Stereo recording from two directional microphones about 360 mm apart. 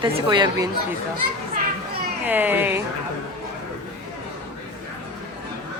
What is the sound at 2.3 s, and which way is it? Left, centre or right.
Speech, centre.